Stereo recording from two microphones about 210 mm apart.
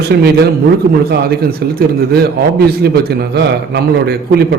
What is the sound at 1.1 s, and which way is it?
A man's voice, 45° right (ahead or behind).